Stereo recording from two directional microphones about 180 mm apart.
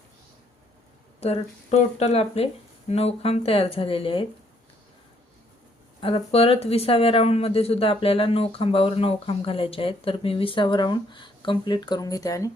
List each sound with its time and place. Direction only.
1.2 s speech: 35° left (ahead or behind)
6.0 s speech: 30° left (ahead or behind)